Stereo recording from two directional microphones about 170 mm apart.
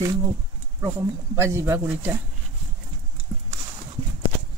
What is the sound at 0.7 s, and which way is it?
Speech, 15° right (ahead or behind).